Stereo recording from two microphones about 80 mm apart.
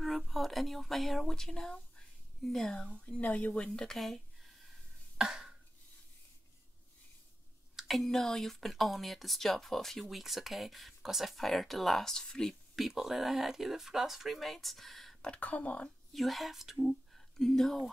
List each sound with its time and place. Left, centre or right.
0.0 s speech: centre
5.1 s a sound: centre
7.7 s speech: centre
15.3 s speech: centre
16.1 s speech: centre